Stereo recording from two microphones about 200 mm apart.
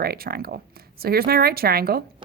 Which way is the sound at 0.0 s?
50° right (ahead or behind).